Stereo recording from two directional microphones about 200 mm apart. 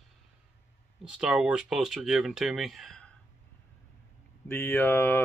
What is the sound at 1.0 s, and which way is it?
Speech, 5° right (ahead or behind).